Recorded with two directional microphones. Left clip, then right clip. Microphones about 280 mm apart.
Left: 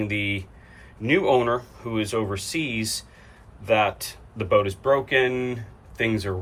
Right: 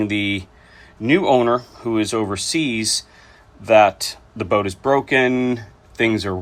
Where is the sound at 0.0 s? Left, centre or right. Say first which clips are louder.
Right 5 dB; centre.